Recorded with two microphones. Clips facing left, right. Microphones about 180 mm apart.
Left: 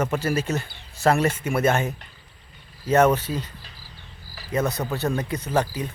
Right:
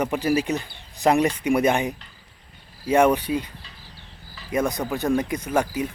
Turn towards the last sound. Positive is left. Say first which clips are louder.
# right 1 dB
turn(degrees=-10)  # may be behind; listen again after turning